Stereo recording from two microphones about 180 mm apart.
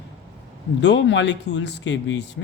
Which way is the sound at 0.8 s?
80° left.